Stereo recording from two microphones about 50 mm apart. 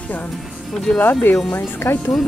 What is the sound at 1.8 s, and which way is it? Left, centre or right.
Speech, left.